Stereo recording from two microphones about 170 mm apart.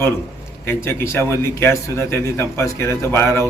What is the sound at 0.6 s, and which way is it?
A man's voice, 15° left (ahead or behind).